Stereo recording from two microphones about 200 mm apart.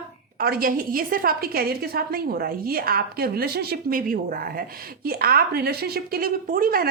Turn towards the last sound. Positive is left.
turn(degrees=-45)  # may be behind; listen again after turning